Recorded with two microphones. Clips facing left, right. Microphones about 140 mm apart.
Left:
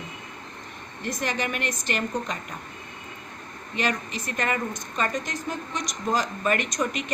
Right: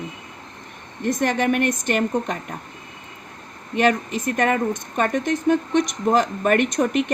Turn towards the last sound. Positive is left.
turn(degrees=-55)  # may be behind; listen again after turning